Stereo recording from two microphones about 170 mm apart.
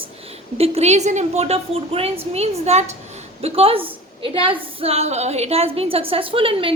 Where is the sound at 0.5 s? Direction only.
35° right (ahead or behind).